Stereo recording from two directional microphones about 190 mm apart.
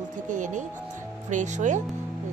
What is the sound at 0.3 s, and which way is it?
A woman's voice, 40° right (ahead or behind).